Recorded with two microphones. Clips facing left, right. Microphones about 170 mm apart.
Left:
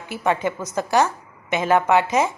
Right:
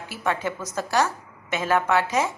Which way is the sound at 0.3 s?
15° left (ahead or behind).